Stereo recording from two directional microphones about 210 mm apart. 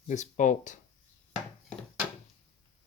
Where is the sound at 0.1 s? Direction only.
35° left (ahead or behind).